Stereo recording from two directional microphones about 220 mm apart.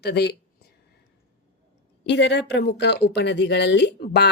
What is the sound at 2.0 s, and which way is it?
A woman's voice, 50° left (ahead or behind).